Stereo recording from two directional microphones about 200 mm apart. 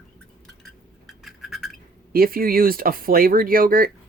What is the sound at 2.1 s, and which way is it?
Speech, 45° right (ahead or behind).